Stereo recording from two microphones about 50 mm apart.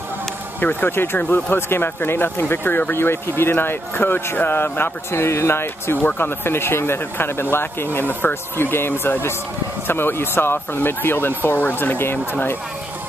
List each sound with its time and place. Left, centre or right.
0.6 s a man's voice: left